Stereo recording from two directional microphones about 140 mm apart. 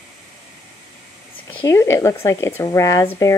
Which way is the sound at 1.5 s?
15° left (ahead or behind).